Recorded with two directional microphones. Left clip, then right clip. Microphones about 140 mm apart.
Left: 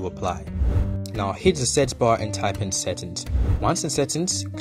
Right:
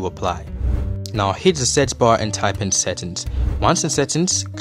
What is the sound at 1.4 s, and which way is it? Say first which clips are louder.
Speech: right 1 dB; 25° right (ahead or behind).